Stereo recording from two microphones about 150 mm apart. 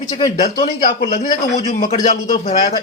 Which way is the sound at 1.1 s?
60° left (ahead or behind).